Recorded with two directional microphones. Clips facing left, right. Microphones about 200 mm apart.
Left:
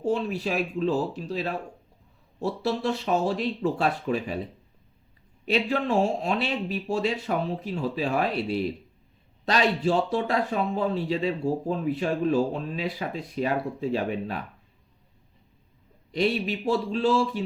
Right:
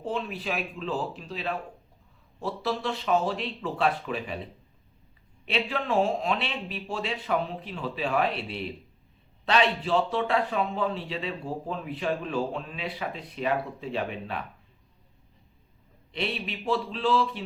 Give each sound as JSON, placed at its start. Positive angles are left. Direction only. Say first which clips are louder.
{"t": 0.0, "sound": "a man's voice", "louder": "left 6 dB", "side_deg": 40}
{"t": 5.5, "sound": "a man's voice", "louder": "left 4 dB", "side_deg": 40}
{"t": 16.1, "sound": "speech", "louder": "left 7 dB", "side_deg": 40}